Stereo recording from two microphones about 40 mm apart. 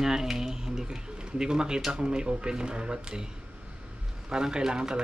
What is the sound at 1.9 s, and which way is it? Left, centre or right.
Speech, right.